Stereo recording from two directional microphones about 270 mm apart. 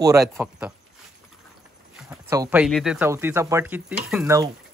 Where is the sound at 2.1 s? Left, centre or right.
Centre.